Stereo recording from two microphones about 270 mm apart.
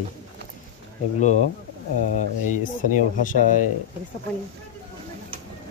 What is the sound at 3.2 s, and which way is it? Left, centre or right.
Speech, left.